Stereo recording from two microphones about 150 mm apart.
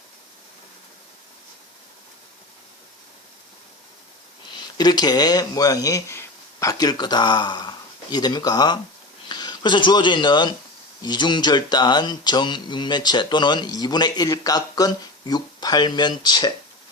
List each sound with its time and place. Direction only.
4.8 s speech: 25° left (ahead or behind)